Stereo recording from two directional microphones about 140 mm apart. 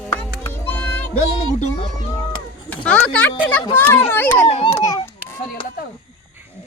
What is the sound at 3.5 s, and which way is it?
Speech, 15° left (ahead or behind).